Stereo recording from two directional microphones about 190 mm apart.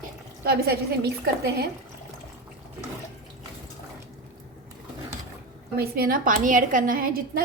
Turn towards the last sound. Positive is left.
turn(degrees=-50)  # may be behind; listen again after turning